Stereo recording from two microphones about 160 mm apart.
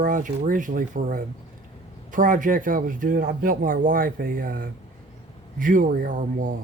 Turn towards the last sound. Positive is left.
turn(degrees=-55)  # may be behind; listen again after turning